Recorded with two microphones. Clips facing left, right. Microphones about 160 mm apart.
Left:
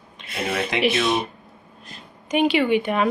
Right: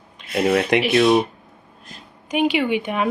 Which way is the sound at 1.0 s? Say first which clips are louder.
Right 7 dB; centre (ahead or behind).